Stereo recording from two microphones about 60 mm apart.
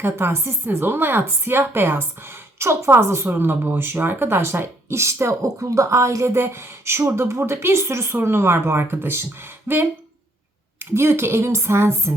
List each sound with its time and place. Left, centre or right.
0.0 s a woman's voice: right